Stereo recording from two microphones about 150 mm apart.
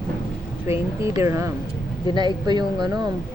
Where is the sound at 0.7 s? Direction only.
20° right (ahead or behind).